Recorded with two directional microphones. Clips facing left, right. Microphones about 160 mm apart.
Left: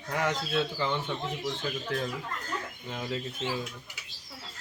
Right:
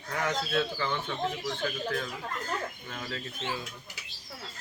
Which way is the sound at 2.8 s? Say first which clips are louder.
Left 4 dB; 20° left (ahead or behind).